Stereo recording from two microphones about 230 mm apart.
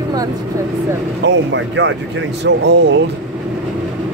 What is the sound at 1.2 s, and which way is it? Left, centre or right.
Speech, right.